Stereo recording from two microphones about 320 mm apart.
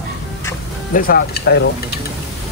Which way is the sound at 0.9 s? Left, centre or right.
Left.